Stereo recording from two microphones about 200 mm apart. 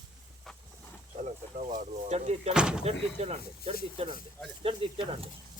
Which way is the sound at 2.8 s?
30° right (ahead or behind).